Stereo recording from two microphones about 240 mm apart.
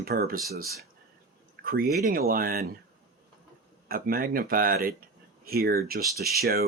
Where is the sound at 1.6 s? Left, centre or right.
Right.